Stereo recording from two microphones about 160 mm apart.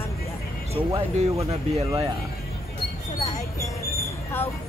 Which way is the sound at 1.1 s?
40° right (ahead or behind).